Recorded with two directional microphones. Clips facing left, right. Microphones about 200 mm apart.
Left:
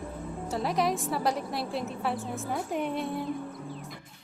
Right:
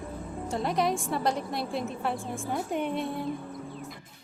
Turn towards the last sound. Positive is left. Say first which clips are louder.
# right 1 dB
turn(degrees=0)  # may be behind; listen again after turning